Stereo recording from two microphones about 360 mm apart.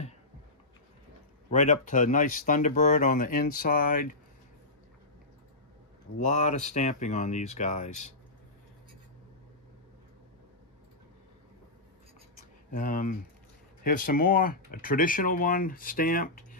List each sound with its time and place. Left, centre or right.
1.5 s speech: centre
6.1 s speech: centre
12.7 s speech: left